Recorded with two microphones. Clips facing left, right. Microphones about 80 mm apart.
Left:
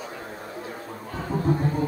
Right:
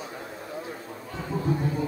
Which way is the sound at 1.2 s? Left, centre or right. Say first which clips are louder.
Left 3 dB; left.